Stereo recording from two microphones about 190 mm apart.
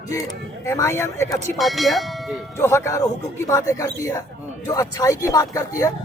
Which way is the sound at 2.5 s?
15° left (ahead or behind).